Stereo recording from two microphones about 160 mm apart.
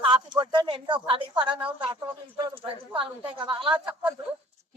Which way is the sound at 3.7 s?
10° right (ahead or behind).